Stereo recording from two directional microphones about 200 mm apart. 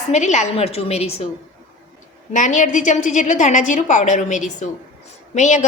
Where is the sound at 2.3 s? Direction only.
40° left (ahead or behind).